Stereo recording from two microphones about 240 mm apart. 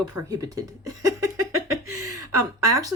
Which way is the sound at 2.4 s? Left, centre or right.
Centre.